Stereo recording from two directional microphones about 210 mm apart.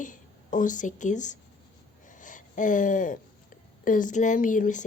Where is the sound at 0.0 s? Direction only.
40° left (ahead or behind).